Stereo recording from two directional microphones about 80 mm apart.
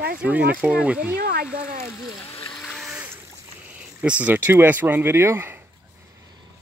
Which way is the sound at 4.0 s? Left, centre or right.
Centre.